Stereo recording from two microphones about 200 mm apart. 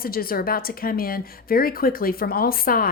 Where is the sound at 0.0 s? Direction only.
50° left (ahead or behind).